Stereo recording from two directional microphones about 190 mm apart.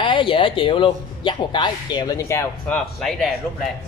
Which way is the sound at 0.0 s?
25° left (ahead or behind).